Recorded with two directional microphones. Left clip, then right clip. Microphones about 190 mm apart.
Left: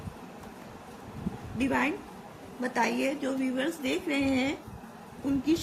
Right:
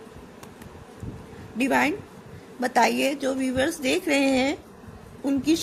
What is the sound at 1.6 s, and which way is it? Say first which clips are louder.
A woman's voice: right 6 dB; 50° right (ahead or behind).